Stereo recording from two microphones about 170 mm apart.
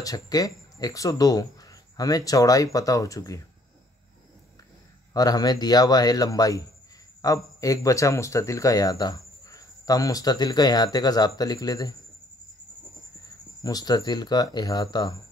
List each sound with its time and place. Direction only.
0.0 s speech: 20° left (ahead or behind)
5.1 s speech: 20° left (ahead or behind)
13.6 s speech: 20° left (ahead or behind)